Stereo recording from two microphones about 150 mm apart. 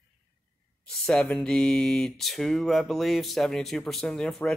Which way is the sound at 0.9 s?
5° left (ahead or behind).